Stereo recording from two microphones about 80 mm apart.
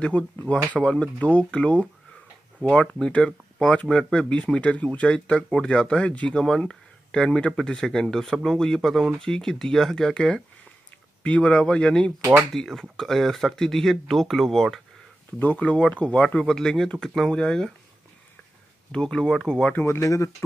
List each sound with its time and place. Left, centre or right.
0.0 s speech: centre
15.3 s speech: left
18.9 s speech: centre
19.7 s speech: left